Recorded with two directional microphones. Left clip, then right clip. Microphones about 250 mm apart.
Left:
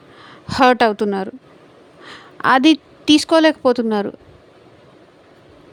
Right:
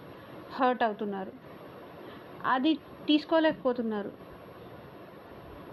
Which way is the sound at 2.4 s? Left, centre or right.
Left.